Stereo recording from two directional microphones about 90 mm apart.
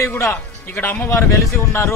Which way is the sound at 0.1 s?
25° left (ahead or behind).